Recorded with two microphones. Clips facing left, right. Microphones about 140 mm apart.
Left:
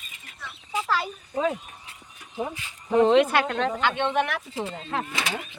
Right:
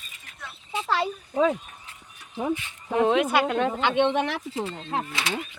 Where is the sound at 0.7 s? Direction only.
25° right (ahead or behind).